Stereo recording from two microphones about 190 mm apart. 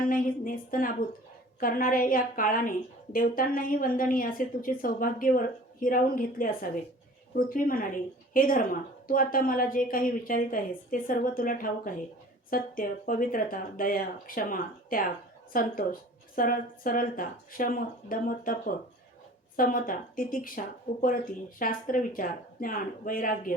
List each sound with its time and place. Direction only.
0.0 s a woman's voice: 50° left (ahead or behind)